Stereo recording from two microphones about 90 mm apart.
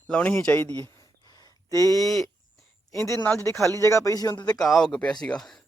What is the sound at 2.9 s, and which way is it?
Speech, 35° left (ahead or behind).